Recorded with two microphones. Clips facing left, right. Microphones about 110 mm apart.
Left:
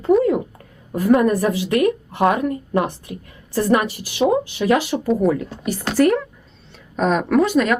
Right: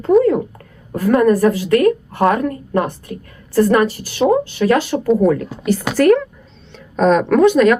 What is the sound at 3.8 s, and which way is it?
A woman's voice, 15° left (ahead or behind).